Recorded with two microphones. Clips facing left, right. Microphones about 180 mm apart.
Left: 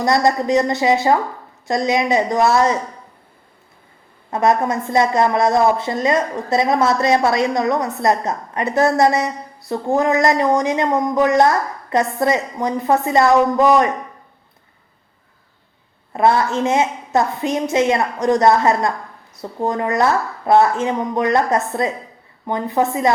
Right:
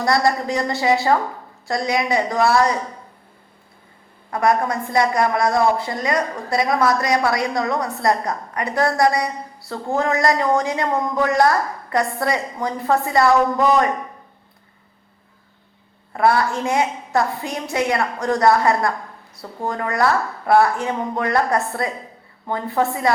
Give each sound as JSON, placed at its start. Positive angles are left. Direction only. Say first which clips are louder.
{"t": 0.0, "sound": "speech", "louder": "left 2 dB", "side_deg": 20}
{"t": 4.3, "sound": "speech", "louder": "left 2 dB", "side_deg": 25}
{"t": 16.1, "sound": "speech", "louder": "left 2 dB", "side_deg": 20}